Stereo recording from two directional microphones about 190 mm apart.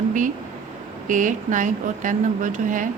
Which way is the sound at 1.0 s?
40° right (ahead or behind).